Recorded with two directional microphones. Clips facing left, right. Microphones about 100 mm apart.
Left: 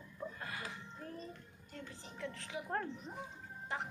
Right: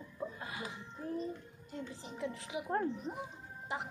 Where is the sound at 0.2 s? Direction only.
15° right (ahead or behind).